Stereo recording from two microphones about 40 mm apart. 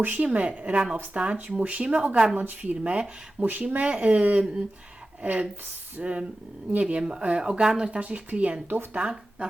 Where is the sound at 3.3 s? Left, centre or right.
Right.